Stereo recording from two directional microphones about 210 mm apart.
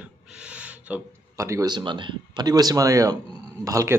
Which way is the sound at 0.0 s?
5° right (ahead or behind).